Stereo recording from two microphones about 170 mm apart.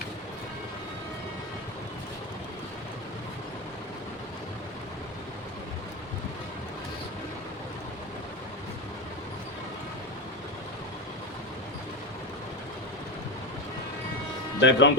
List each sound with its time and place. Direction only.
14.6 s speech: 90° left